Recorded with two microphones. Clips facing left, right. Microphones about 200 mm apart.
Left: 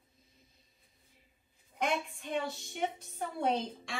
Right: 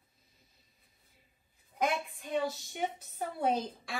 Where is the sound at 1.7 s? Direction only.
Centre (ahead or behind).